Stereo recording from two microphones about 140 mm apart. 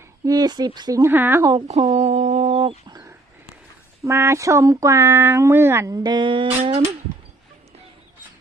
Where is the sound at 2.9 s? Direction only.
25° right (ahead or behind).